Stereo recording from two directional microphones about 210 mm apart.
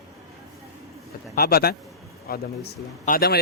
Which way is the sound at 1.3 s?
45° left (ahead or behind).